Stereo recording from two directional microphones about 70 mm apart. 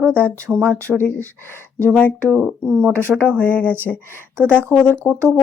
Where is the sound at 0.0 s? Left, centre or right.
Right.